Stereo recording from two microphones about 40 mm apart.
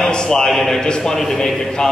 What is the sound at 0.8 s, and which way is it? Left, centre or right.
A man's voice, centre.